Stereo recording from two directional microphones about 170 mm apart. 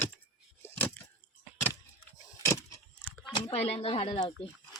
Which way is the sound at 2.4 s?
15° left (ahead or behind).